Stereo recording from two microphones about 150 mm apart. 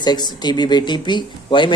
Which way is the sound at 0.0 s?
30° left (ahead or behind).